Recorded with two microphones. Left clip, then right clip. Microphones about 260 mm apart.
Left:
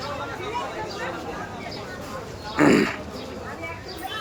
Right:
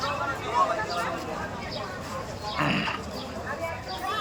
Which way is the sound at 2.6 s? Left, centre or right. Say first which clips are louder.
Left 9 dB; left.